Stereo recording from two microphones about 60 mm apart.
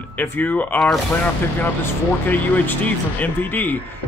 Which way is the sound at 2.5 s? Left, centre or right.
Left.